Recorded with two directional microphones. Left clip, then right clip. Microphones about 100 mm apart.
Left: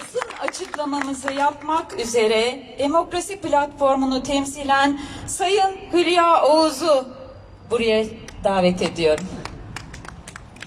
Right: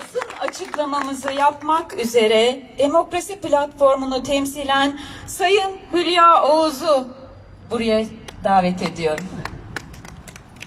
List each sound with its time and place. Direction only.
0.2 s a woman's voice: centre (ahead or behind)
3.5 s a woman's voice: 5° right (ahead or behind)
6.7 s speech: 20° left (ahead or behind)